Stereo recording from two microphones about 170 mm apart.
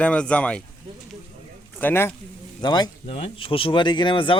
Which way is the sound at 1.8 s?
10° left (ahead or behind).